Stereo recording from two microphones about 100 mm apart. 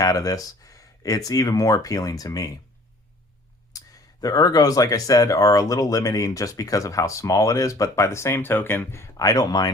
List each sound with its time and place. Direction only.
0.0 s speech: 35° left (ahead or behind)
3.7 s speech: 40° left (ahead or behind)